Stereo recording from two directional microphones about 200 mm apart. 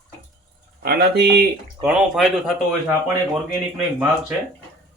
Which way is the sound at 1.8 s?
25° right (ahead or behind).